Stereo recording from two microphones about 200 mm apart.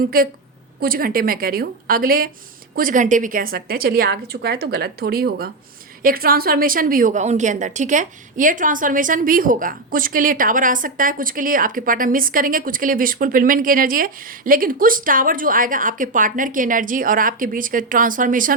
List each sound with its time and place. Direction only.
0.0 s a woman's voice: 50° right (ahead or behind)